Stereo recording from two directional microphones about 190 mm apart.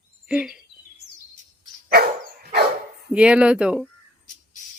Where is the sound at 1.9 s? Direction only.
55° right (ahead or behind).